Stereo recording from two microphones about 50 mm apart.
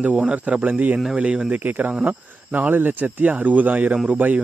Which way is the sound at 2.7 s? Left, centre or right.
Right.